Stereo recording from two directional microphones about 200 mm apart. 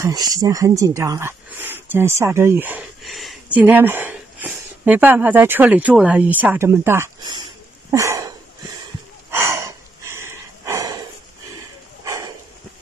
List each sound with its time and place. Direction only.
0.0 s speech: 20° right (ahead or behind)
7.9 s a sound: 15° right (ahead or behind)
12.0 s bow-wow: 15° right (ahead or behind)